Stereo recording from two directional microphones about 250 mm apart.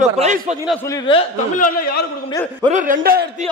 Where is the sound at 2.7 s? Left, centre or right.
Right.